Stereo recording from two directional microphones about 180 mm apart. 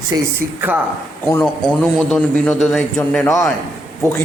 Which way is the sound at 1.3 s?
10° left (ahead or behind).